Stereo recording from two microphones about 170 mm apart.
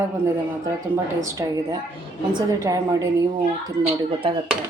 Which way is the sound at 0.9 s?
20° right (ahead or behind).